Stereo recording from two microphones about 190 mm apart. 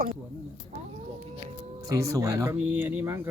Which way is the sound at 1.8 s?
15° right (ahead or behind).